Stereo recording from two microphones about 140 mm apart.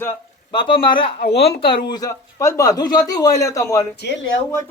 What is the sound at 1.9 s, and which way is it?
Speech, 25° left (ahead or behind).